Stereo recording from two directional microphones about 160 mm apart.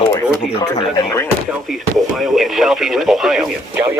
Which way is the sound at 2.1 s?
Centre (ahead or behind).